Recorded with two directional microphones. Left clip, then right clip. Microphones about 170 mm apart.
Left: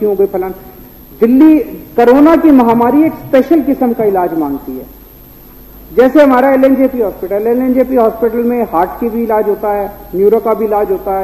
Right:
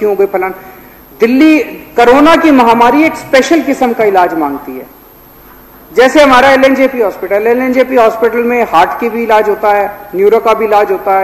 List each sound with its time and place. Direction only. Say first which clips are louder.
0.0 s a man's voice: right 2 dB; 20° right (ahead or behind)
2.0 s a man's voice: right 2 dB; 30° right (ahead or behind)
5.9 s a man's voice: right 2 dB; 25° right (ahead or behind)